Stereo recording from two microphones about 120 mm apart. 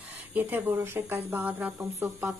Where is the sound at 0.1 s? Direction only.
15° right (ahead or behind).